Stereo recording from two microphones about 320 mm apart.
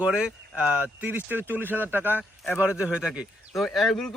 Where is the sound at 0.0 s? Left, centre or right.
Centre.